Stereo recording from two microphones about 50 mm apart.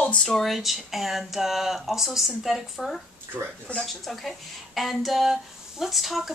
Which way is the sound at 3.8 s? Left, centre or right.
Centre.